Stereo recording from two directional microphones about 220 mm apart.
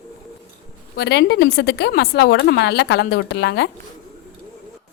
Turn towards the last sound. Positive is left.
turn(degrees=50)  # may be behind; listen again after turning